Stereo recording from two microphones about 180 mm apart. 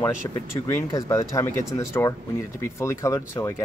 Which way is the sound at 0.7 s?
15° left (ahead or behind).